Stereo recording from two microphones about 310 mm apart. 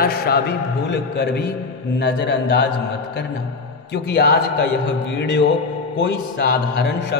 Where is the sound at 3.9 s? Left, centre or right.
Left.